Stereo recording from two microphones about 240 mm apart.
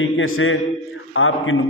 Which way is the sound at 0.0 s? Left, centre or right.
Left.